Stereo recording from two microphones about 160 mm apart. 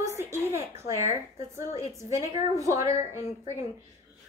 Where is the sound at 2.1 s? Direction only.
20° right (ahead or behind).